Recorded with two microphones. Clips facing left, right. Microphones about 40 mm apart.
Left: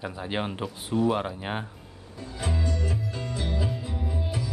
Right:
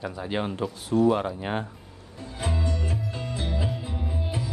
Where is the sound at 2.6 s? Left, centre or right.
Right.